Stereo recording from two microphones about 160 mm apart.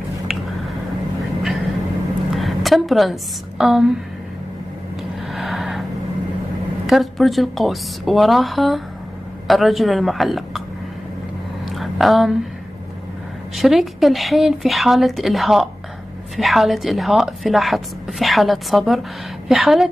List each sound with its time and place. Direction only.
1.4 s vehicle: centre (ahead or behind)
2.3 s a woman's voice: centre (ahead or behind)
5.3 s a sound: centre (ahead or behind)
6.9 s a woman's voice: centre (ahead or behind)
11.7 s a sound: centre (ahead or behind)
13.6 s a woman's voice: centre (ahead or behind)